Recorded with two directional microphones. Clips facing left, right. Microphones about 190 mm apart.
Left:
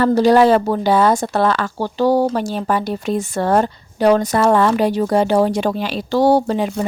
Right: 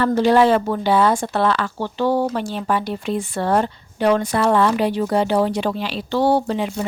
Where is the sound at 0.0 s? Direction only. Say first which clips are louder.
Left 3 dB; 40° left (ahead or behind).